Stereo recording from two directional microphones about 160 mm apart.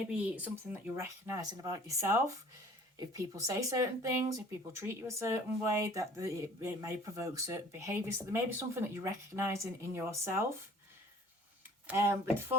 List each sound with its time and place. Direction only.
0.1 s speech: 10° right (ahead or behind)
11.9 s speech: 15° right (ahead or behind)